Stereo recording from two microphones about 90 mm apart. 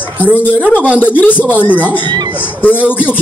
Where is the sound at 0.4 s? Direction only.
20° left (ahead or behind).